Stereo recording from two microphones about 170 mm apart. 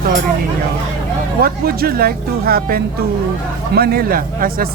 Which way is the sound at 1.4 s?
65° right (ahead or behind).